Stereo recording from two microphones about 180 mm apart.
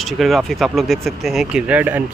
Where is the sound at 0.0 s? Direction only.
Centre (ahead or behind).